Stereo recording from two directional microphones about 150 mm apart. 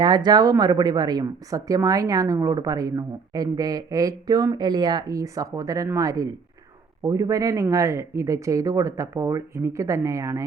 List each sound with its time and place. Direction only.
0.0 s speech: 30° right (ahead or behind)